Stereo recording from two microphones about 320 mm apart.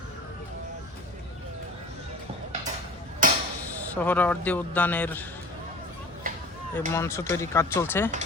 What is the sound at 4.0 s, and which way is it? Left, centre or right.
A man's voice, centre.